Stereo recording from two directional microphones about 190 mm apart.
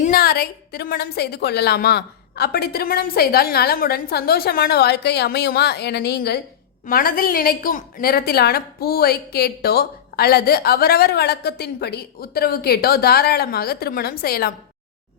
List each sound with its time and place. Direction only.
0.0 s a woman's voice: 50° left (ahead or behind)